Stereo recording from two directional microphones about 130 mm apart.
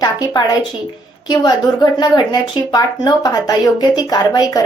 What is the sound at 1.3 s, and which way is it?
Speech, 30° left (ahead or behind).